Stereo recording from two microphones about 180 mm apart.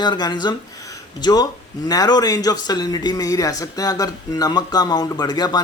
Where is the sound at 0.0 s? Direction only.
25° left (ahead or behind).